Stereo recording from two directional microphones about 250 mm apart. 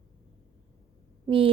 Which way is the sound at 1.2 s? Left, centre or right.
Right.